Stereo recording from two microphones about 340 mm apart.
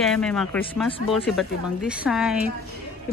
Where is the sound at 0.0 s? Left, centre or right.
Centre.